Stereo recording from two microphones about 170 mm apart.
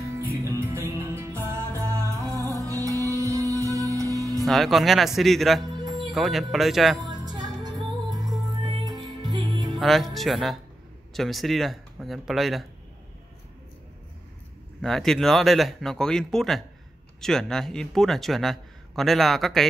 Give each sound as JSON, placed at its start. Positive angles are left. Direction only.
{"t": 0.6, "sound": "music", "side_deg": -15}
{"t": 4.5, "sound": "a man's voice", "side_deg": 0}
{"t": 7.1, "sound": "music", "side_deg": -25}
{"t": 8.7, "sound": "music", "side_deg": -25}
{"t": 9.8, "sound": "a man's voice", "side_deg": 0}
{"t": 14.8, "sound": "a man's voice", "side_deg": 0}